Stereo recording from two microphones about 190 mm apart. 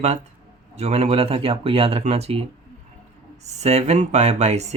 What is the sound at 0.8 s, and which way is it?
Speech, 35° right (ahead or behind).